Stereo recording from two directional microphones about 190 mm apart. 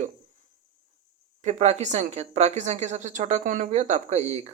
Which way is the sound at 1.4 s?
40° right (ahead or behind).